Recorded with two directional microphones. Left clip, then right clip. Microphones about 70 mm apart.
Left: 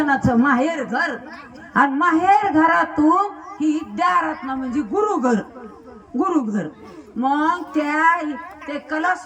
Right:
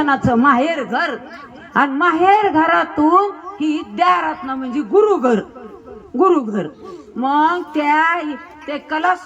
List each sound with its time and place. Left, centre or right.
0.1 s a woman's voice: right
6.3 s a man's voice: right
7.2 s a woman's voice: right